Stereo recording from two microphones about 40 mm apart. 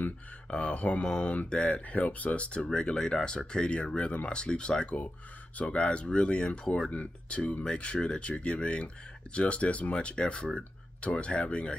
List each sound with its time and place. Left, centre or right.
0.5 s speech: left
1.0 s speech: left
1.9 s speech: left
2.7 s speech: centre